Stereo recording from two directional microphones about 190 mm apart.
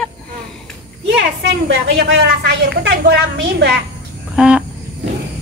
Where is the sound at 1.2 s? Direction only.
75° right (ahead or behind).